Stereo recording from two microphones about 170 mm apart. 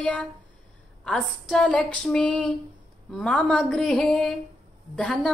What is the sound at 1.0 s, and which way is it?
A woman's voice, centre (ahead or behind).